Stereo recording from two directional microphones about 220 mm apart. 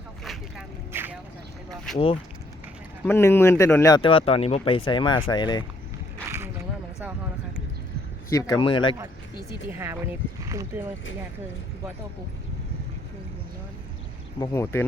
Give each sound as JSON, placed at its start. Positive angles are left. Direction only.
{"t": 0.3, "sound": "vehicle", "side_deg": -5}
{"t": 1.9, "sound": "speech", "side_deg": 0}
{"t": 3.1, "sound": "speech", "side_deg": 10}
{"t": 6.3, "sound": "a sound", "side_deg": -10}
{"t": 8.3, "sound": "speech", "side_deg": 15}
{"t": 9.5, "sound": "speech", "side_deg": -10}
{"t": 14.3, "sound": "speech", "side_deg": 15}